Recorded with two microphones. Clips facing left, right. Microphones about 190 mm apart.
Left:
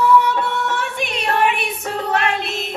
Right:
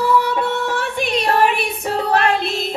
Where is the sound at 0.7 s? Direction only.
35° right (ahead or behind).